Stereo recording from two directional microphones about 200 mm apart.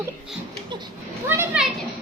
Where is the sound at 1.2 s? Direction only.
10° right (ahead or behind).